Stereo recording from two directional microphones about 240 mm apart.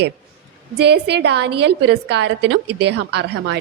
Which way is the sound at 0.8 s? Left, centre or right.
Right.